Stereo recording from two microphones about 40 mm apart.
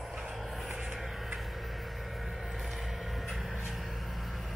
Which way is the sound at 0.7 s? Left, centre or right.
Centre.